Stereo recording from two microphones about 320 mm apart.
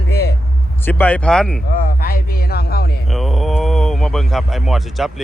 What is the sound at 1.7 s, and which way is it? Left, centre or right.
A man's voice, left.